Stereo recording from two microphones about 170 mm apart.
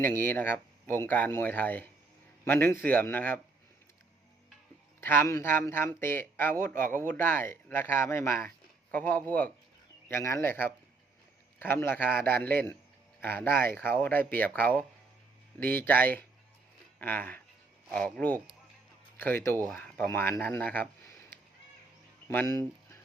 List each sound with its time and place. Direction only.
0.0 s speech: 10° left (ahead or behind)
4.9 s speech: 15° left (ahead or behind)